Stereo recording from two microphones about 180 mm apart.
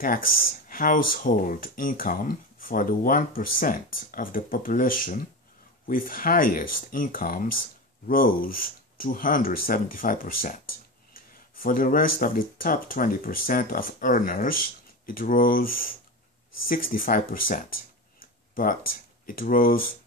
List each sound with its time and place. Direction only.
0.7 s speech: 50° left (ahead or behind)
11.6 s speech: 50° left (ahead or behind)